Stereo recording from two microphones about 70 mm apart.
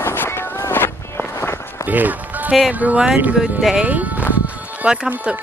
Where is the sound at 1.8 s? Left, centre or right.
Right.